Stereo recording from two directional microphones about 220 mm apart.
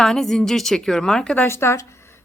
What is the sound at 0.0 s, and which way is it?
A woman's voice, centre (ahead or behind).